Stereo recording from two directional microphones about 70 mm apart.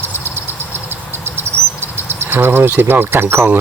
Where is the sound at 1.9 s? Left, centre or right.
Right.